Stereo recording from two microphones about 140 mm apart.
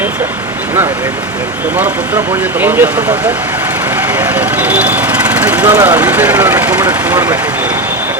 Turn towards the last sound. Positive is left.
turn(degrees=-10)  # may be behind; listen again after turning